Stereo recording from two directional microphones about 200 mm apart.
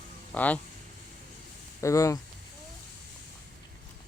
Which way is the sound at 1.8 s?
15° left (ahead or behind).